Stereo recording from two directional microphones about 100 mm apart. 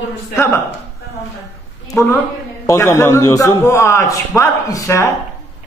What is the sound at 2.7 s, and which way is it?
A man's voice, 30° left (ahead or behind).